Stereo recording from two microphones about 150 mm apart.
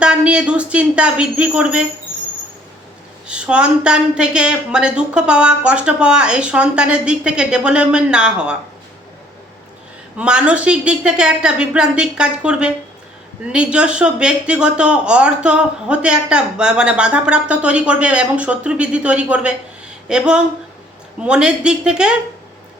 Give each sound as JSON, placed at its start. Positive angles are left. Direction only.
{"t": 0.0, "sound": "speech", "side_deg": -5}
{"t": 3.2, "sound": "speech", "side_deg": -5}
{"t": 10.2, "sound": "speech", "side_deg": -5}